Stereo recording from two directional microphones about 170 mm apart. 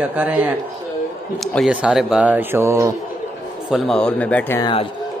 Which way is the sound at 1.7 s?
5° right (ahead or behind).